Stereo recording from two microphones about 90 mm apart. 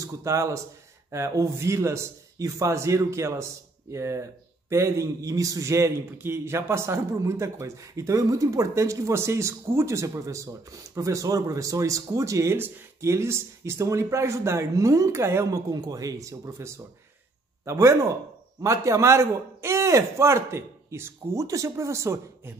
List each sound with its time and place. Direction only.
0.0 s a man's voice: 35° right (ahead or behind)
15.7 s a man's voice: 45° right (ahead or behind)